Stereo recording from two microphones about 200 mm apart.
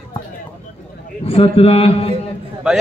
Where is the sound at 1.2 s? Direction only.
30° left (ahead or behind).